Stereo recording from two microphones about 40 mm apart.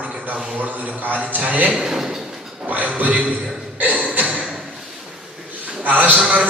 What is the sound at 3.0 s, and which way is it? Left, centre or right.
Speech, right.